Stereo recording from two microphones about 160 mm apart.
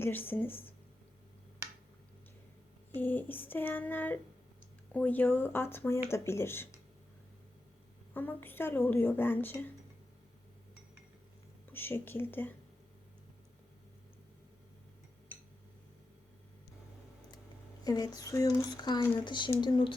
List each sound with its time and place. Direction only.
0.0 s speech: 10° left (ahead or behind)
2.9 s speech: 10° left (ahead or behind)
8.1 s speech: 10° left (ahead or behind)
11.7 s speech: 15° left (ahead or behind)
17.8 s speech: 25° left (ahead or behind)